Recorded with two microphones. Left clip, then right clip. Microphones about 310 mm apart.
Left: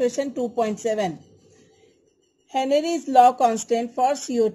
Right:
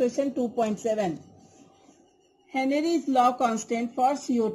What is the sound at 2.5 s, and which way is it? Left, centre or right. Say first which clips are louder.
Speech: left 5 dB; left.